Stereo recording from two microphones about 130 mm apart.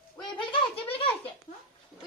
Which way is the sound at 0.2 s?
40° left (ahead or behind).